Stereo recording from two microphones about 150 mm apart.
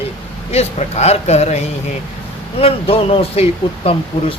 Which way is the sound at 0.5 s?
45° left (ahead or behind).